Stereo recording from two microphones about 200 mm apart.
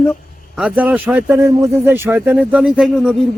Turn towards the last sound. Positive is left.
turn(degrees=0)  # may be behind; listen again after turning